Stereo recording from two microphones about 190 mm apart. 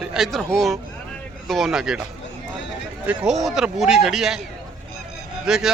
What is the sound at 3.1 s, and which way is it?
A man's voice, centre (ahead or behind).